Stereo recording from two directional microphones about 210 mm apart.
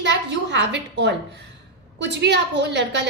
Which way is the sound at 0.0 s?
55° right (ahead or behind).